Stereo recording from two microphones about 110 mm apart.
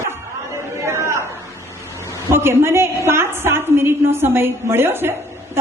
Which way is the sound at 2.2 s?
20° right (ahead or behind).